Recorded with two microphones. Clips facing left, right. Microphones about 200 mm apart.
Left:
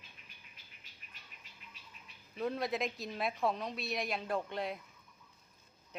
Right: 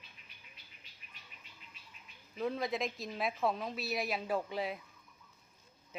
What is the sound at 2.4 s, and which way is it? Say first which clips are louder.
A woman's voice: even; centre (ahead or behind).